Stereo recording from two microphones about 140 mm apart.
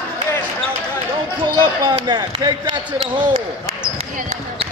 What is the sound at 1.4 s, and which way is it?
Basketball bounce, 35° right (ahead or behind).